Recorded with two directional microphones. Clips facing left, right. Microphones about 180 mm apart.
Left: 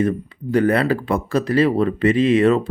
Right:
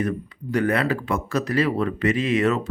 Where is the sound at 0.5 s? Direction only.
35° left (ahead or behind).